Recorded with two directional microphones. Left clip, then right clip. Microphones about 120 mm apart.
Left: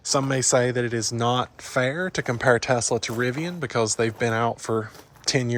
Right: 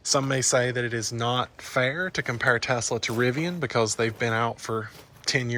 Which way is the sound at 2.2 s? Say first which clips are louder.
Left 4 dB; 45° left (ahead or behind).